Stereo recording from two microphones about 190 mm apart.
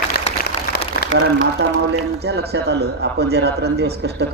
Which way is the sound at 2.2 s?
60° right (ahead or behind).